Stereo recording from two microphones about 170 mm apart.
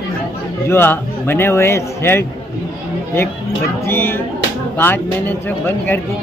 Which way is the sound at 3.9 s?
15° left (ahead or behind).